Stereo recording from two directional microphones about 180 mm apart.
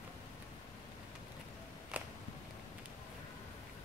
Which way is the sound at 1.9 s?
5° right (ahead or behind).